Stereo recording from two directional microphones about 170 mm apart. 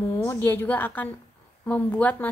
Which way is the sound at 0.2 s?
15° left (ahead or behind).